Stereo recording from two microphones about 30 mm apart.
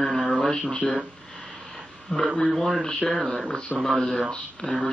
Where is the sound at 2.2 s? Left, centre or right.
Right.